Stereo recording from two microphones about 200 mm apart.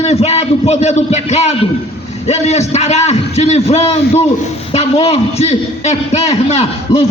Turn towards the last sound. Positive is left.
turn(degrees=30)  # may be behind; listen again after turning